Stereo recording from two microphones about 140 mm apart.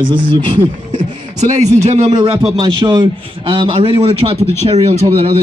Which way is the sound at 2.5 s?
30° right (ahead or behind).